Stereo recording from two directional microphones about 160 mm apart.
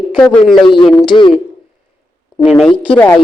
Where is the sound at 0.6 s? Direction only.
35° left (ahead or behind).